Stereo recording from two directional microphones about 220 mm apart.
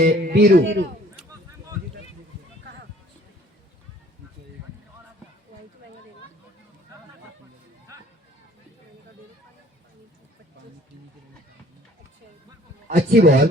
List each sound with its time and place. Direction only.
0.0 s speech: 45° right (ahead or behind)
12.9 s speech: 40° right (ahead or behind)